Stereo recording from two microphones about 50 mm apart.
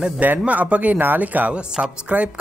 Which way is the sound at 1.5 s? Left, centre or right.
Right.